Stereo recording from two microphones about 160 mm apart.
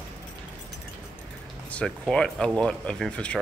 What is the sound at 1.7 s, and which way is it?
Speech, 5° left (ahead or behind).